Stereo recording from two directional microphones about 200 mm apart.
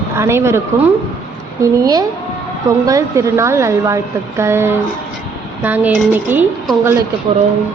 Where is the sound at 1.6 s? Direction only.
20° right (ahead or behind).